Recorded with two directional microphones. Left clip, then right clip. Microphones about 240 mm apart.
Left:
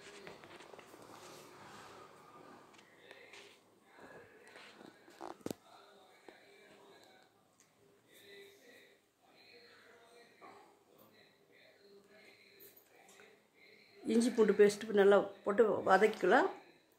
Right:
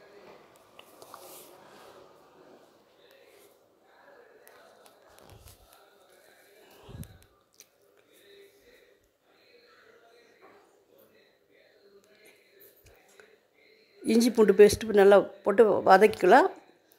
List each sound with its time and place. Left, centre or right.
14.0 s speech: right